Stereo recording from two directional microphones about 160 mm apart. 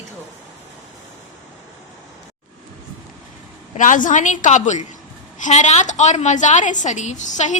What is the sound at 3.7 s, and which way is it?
A woman's voice, 55° left (ahead or behind).